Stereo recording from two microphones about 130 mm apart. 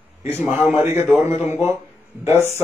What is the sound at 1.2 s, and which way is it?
Speech, 20° right (ahead or behind).